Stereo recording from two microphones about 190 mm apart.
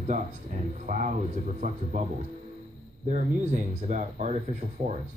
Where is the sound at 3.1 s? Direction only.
40° right (ahead or behind).